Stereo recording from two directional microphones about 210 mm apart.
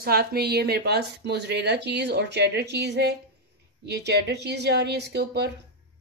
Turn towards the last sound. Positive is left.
turn(degrees=-55)  # may be behind; listen again after turning